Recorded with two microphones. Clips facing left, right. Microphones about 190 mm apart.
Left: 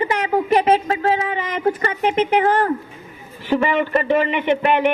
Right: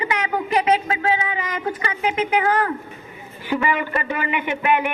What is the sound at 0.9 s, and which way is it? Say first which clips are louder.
Speech: left 3 dB; 40° left (ahead or behind).